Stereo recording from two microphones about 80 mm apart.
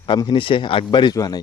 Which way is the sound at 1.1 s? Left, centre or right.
Left.